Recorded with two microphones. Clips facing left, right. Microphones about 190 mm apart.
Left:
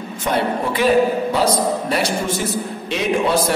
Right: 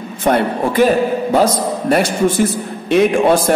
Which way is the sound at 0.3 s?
50° right (ahead or behind).